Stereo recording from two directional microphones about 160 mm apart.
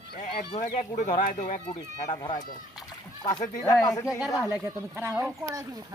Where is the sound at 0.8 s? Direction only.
45° left (ahead or behind).